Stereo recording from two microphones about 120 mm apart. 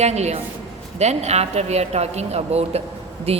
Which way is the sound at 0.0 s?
65° right (ahead or behind).